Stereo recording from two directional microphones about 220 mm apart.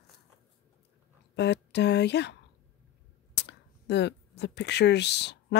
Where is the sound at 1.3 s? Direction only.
50° left (ahead or behind).